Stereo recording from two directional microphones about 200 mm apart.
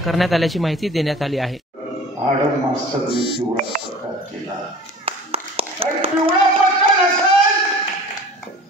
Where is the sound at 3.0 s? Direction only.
25° left (ahead or behind).